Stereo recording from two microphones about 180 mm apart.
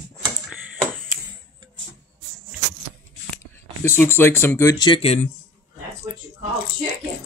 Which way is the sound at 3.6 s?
15° left (ahead or behind).